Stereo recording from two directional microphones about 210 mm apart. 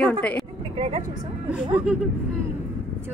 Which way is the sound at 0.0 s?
5° left (ahead or behind).